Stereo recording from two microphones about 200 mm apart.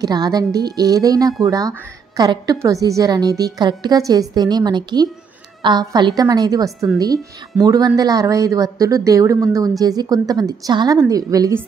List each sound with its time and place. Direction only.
0.0 s a woman's voice: 20° right (ahead or behind)